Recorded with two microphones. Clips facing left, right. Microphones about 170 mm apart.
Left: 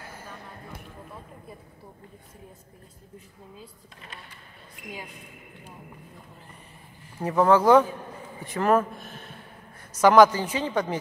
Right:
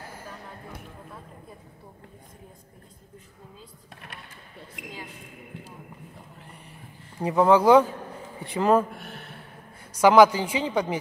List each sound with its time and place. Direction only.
4.8 s speech: 85° right
7.2 s speech: 15° right (ahead or behind)
8.9 s speech: 70° right (ahead or behind)
9.9 s speech: 10° right (ahead or behind)